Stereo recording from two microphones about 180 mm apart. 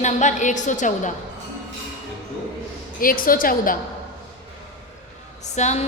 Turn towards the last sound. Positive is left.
turn(degrees=40)  # may be behind; listen again after turning